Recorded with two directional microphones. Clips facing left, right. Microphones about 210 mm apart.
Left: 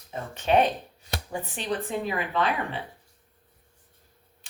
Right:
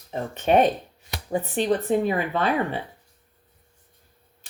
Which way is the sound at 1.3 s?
40° right (ahead or behind).